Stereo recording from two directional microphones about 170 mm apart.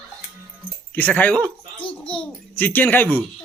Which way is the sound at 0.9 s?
10° left (ahead or behind).